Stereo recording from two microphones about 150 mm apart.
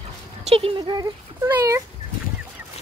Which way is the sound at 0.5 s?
35° right (ahead or behind).